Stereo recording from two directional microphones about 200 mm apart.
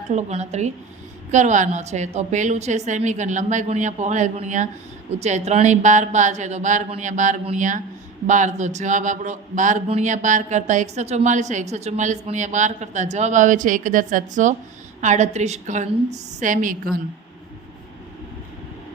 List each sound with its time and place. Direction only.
0.1 s a man's voice: 35° right (ahead or behind)